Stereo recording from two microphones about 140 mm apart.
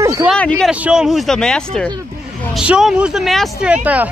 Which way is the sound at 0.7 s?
5° right (ahead or behind).